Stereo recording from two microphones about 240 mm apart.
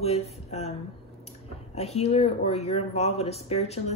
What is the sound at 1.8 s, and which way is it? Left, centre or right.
Speech, left.